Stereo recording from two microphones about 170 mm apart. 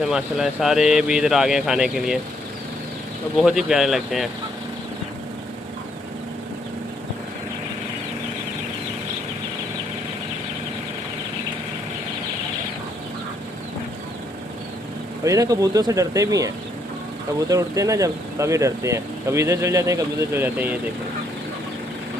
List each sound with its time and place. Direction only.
0.0 s speech: centre (ahead or behind)
3.3 s speech: 5° right (ahead or behind)
15.2 s speech: 20° right (ahead or behind)